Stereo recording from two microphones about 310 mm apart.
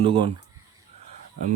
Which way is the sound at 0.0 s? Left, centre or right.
Centre.